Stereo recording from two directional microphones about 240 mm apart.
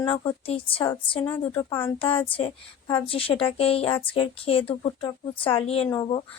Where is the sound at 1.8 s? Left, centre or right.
Left.